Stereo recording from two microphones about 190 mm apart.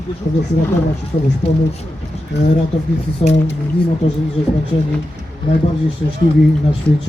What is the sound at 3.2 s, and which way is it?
Speech, 30° left (ahead or behind).